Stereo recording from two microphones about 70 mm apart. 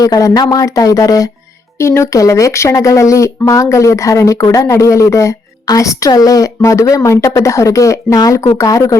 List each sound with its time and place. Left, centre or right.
0.0 s speech: left
1.8 s a woman's voice: left